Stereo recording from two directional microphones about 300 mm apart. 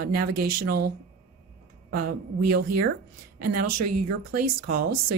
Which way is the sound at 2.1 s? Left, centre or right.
Right.